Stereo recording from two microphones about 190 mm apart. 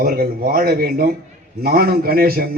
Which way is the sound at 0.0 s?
50° right (ahead or behind).